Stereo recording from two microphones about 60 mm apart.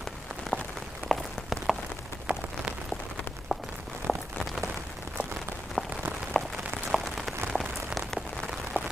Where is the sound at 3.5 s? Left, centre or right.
Centre.